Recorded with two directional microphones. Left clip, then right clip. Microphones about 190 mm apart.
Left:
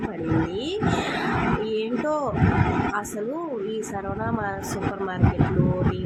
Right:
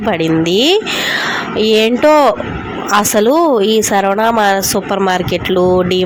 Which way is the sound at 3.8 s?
55° right (ahead or behind).